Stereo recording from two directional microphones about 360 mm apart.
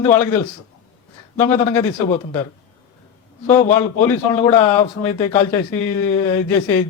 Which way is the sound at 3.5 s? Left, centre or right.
Centre.